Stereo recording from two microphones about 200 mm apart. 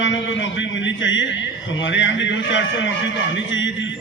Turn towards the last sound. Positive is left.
turn(degrees=70)  # may be behind; listen again after turning